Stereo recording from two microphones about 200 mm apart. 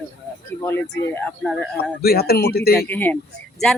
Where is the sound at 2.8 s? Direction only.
10° left (ahead or behind).